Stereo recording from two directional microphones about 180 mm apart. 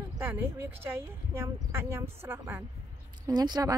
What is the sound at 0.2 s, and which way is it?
A woman's voice, 10° right (ahead or behind).